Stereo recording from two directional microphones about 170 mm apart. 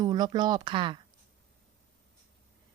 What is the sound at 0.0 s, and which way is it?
Speech, 25° right (ahead or behind).